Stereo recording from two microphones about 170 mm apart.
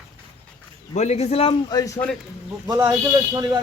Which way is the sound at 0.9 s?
40° left (ahead or behind).